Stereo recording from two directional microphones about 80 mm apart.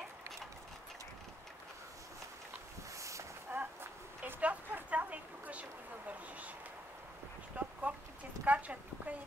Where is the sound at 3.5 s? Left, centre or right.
Right.